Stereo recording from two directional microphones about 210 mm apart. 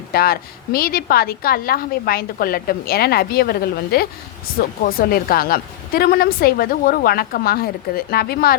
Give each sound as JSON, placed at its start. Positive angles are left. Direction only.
{"t": 0.1, "sound": "a woman's voice", "side_deg": 45}